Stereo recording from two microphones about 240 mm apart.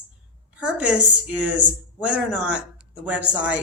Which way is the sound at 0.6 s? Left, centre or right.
Centre.